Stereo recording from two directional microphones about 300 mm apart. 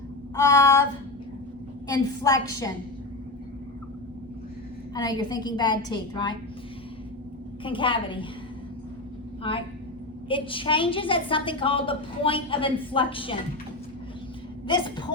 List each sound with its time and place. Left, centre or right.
0.3 s a woman's voice: centre
1.9 s a woman's voice: centre
4.9 s a woman's voice: centre
7.6 s a woman's voice: centre
9.4 s a woman's voice: centre
14.7 s a woman's voice: centre